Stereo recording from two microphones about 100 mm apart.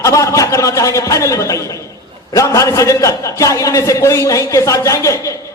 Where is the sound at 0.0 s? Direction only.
30° left (ahead or behind).